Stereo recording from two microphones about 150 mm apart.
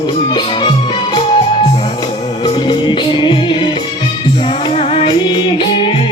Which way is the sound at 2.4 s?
30° left (ahead or behind).